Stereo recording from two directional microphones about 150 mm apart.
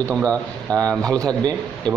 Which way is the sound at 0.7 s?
25° right (ahead or behind).